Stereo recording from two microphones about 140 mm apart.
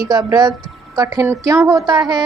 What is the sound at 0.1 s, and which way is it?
A woman's voice, 25° right (ahead or behind).